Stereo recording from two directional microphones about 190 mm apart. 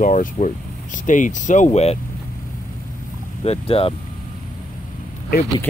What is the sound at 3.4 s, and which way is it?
Speech, 30° left (ahead or behind).